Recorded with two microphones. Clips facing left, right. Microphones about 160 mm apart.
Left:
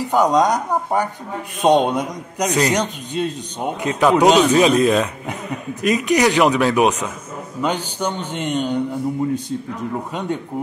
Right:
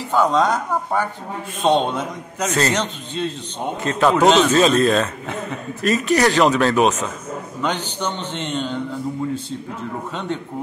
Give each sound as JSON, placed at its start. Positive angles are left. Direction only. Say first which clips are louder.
{"t": 0.0, "sound": "a man's voice", "louder": "left 2 dB", "side_deg": 15}